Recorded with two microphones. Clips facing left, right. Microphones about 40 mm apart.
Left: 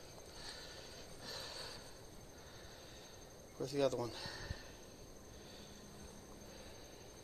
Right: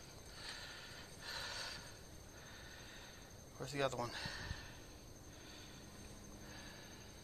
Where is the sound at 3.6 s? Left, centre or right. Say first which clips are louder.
Left 4 dB; right.